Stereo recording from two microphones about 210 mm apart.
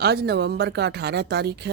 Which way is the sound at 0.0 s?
50° right (ahead or behind).